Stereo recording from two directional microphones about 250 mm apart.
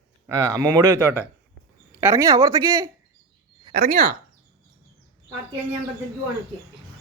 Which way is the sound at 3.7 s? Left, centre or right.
Right.